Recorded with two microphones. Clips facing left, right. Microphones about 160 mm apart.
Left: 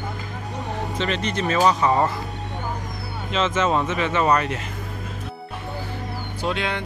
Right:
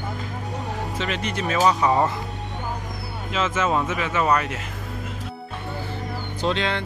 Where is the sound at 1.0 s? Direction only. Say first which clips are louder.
Left 3 dB; 5° right (ahead or behind).